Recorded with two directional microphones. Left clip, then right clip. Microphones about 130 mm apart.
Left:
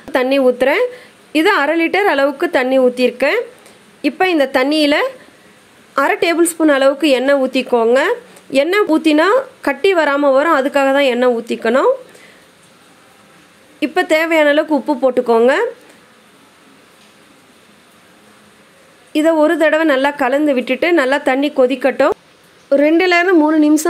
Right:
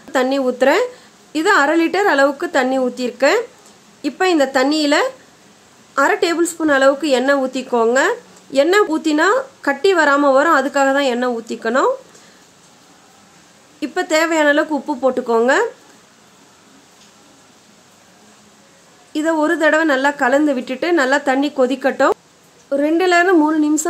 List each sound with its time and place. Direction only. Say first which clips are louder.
0.1 s a woman's voice: left 4 dB; 20° left (ahead or behind)
13.7 s a woman's voice: left 3 dB; 20° left (ahead or behind)
19.1 s a woman's voice: left 5 dB; 20° left (ahead or behind)